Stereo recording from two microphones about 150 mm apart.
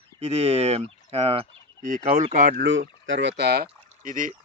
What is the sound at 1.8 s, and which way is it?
Speech, 60° right (ahead or behind).